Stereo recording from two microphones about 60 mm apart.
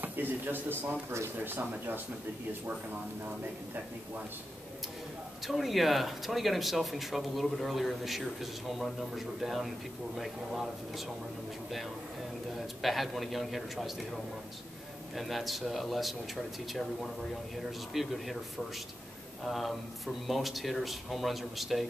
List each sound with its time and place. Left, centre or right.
0.0 s a man's voice: right
5.4 s speech: centre
12.5 s speech: centre
15.1 s speech: centre
19.4 s speech: centre